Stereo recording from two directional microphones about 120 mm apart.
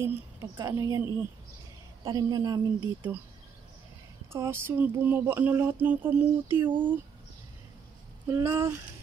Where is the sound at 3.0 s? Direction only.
15° right (ahead or behind).